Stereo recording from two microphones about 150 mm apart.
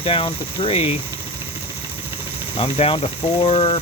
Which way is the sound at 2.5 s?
40° left (ahead or behind).